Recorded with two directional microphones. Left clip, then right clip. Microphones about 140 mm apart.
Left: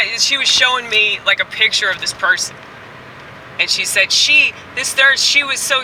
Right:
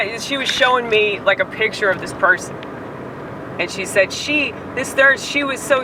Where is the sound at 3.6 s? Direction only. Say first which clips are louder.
Left 3 dB; 25° left (ahead or behind).